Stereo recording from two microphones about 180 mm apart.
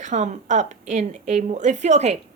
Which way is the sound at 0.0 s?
40° right (ahead or behind).